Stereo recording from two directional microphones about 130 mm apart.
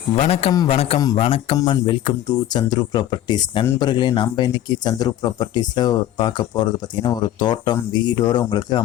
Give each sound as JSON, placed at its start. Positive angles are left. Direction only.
{"t": 0.2, "sound": "speech", "side_deg": 55}
{"t": 1.5, "sound": "speech", "side_deg": 30}